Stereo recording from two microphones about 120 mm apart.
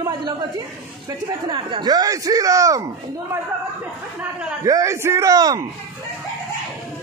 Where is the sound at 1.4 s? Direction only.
40° right (ahead or behind).